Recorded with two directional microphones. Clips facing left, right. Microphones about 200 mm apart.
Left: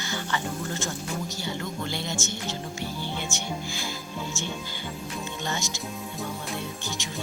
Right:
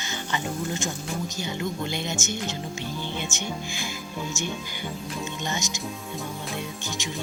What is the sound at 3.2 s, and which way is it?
Speech, 20° right (ahead or behind).